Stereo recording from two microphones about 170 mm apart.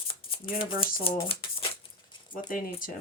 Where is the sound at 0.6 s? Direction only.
35° left (ahead or behind).